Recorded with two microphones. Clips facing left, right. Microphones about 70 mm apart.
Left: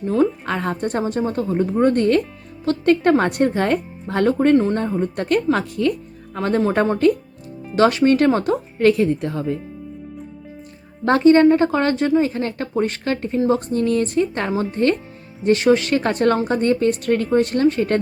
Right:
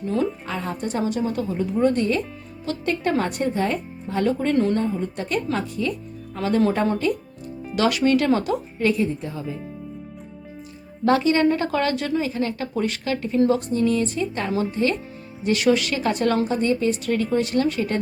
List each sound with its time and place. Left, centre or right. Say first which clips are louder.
0.0 s speech: left 6 dB; left
0.4 s a woman's voice: left 5 dB; left
1.0 s a woman's voice: left 3 dB; left
6.3 s speech: left 2 dB; left
7.8 s speech: left 5 dB; left
8.9 s speech: left 6 dB; left
11.0 s a woman's voice: left 6 dB; left
12.2 s a woman's voice: left 3 dB; left
15.4 s a woman's voice: left 4 dB; left